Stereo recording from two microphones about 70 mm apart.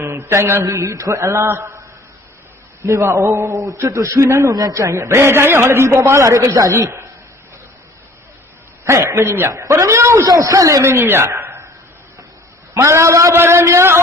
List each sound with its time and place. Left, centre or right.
0.3 s a man's voice: right
0.9 s a sound: right
2.8 s a sound: right
4.5 s a man's voice: right
4.8 s a man's voice: right
8.8 s a man's voice: right
9.2 s a man's voice: right
9.6 s a sound: right
10.2 s a man's voice: right
10.8 s a man's voice: right
12.7 s a sound: right
13.3 s a man's voice: right